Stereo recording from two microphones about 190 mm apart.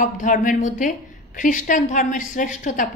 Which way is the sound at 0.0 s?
40° left (ahead or behind).